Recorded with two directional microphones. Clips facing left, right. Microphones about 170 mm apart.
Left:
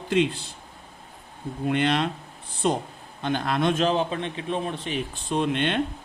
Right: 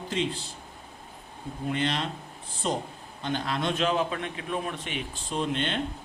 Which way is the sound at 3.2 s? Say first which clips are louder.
Left 5 dB; 55° left (ahead or behind).